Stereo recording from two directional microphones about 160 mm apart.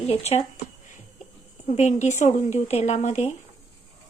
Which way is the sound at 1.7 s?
45° left (ahead or behind).